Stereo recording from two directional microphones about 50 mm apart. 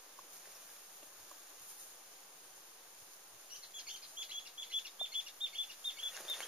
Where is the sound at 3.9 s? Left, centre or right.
Centre.